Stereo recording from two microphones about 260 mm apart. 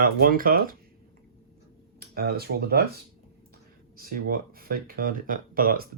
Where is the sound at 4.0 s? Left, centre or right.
Right.